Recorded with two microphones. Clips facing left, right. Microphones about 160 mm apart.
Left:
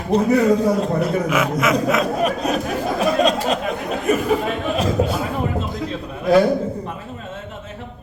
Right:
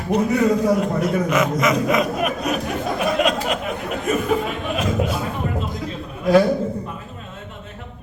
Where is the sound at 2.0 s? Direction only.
35° left (ahead or behind).